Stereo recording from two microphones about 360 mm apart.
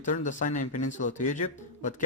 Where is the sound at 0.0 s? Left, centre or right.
Left.